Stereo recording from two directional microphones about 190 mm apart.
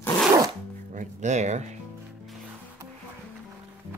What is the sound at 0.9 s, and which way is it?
Speech, 40° right (ahead or behind).